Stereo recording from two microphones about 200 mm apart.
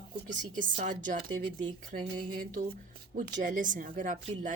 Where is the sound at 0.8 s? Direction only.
40° right (ahead or behind).